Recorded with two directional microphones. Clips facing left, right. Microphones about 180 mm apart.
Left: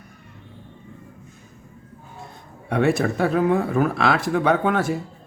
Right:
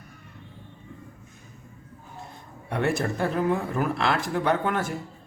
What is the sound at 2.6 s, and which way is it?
Speech, 70° left (ahead or behind).